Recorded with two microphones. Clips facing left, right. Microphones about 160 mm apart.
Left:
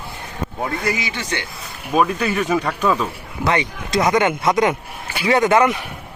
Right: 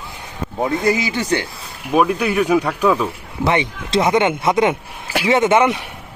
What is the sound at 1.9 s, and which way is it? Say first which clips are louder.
Speech: right 2 dB; 10° right (ahead or behind).